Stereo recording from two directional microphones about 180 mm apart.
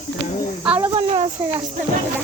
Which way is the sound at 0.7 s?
30° right (ahead or behind).